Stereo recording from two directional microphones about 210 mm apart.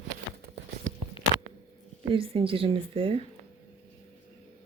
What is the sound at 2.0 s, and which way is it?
A woman's voice, 25° right (ahead or behind).